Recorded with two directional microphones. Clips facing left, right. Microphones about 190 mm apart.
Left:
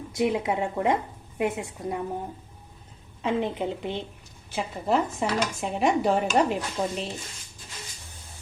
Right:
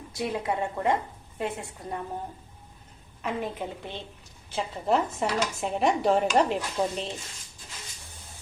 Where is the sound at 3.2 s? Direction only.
20° left (ahead or behind).